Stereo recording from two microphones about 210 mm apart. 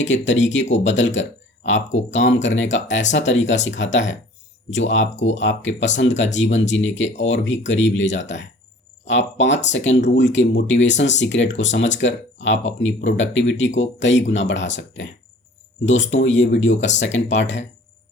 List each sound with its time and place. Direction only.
0.0 s speech: 60° left (ahead or behind)
16.7 s speech: 35° left (ahead or behind)
17.2 s speech: 60° left (ahead or behind)